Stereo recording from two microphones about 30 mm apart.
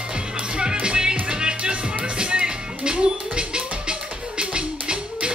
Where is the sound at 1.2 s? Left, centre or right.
Right.